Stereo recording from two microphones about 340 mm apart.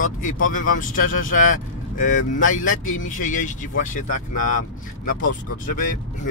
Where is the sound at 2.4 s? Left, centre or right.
Left.